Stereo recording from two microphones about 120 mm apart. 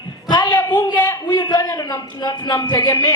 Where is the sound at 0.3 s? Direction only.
35° left (ahead or behind).